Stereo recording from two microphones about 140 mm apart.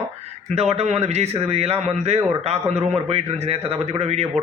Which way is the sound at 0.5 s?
50° right (ahead or behind).